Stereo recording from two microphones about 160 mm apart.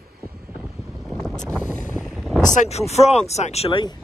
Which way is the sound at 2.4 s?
45° left (ahead or behind).